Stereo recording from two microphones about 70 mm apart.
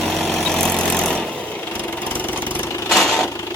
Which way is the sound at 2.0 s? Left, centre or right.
Left.